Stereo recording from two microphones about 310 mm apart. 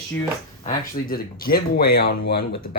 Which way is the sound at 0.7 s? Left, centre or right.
Left.